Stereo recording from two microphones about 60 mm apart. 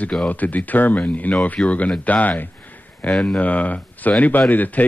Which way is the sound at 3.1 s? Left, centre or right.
Centre.